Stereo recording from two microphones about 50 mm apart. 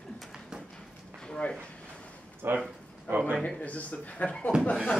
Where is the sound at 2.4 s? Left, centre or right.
Right.